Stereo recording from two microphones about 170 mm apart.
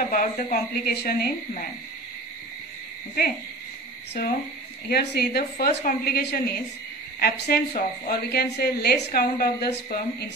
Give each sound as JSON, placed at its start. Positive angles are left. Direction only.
{"t": 0.1, "sound": "a woman's voice", "side_deg": 50}
{"t": 4.1, "sound": "a woman's voice", "side_deg": 60}
{"t": 5.8, "sound": "a woman's voice", "side_deg": 60}